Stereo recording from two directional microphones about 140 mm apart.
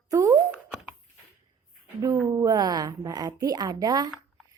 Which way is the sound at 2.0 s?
25° right (ahead or behind).